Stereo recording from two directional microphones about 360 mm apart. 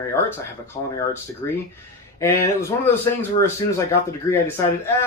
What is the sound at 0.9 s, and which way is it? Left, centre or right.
Speech, centre.